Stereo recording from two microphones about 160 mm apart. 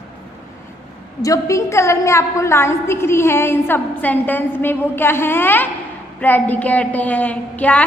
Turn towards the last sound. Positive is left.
turn(degrees=10)  # may be behind; listen again after turning